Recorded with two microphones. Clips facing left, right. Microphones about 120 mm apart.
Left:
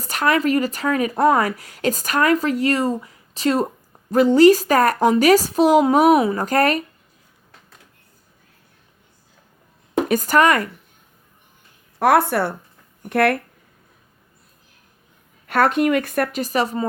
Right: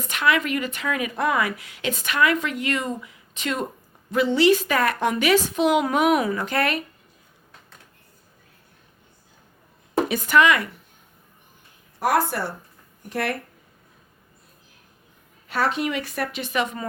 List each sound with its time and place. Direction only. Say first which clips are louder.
0.0 s speech: left 3 dB; 40° left (ahead or behind)
10.1 s a woman's voice: left 3 dB; 40° left (ahead or behind)
11.9 s speech: left 6 dB; 65° left (ahead or behind)
15.4 s a woman's voice: left 7 dB; 55° left (ahead or behind); by 16.8 s 35° left (ahead or behind)